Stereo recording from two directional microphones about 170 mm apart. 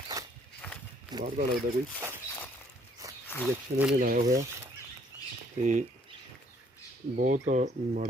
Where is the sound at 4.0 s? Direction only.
55° right (ahead or behind).